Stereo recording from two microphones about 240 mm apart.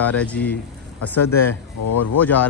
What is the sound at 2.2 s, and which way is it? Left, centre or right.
Speech, centre.